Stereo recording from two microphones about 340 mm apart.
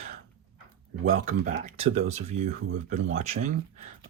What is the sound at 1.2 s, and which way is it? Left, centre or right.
Speech, centre.